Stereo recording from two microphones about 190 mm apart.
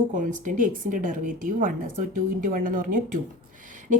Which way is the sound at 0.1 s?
40° right (ahead or behind).